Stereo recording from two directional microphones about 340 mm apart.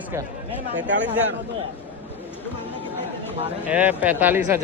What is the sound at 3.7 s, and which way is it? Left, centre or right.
Speech, centre.